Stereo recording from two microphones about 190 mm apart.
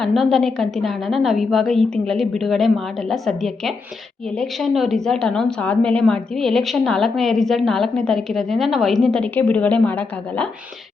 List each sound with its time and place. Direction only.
0.0 s a woman's voice: centre (ahead or behind)